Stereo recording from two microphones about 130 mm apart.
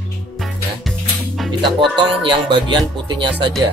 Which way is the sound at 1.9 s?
40° right (ahead or behind).